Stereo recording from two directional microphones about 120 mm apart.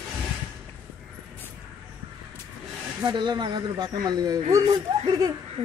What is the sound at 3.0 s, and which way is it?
Speech, 40° right (ahead or behind).